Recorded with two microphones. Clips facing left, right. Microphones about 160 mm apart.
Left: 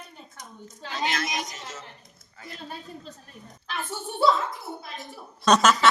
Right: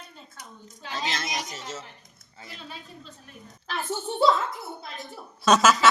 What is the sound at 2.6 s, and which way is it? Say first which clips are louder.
Speech: left 4 dB; 45° left (ahead or behind).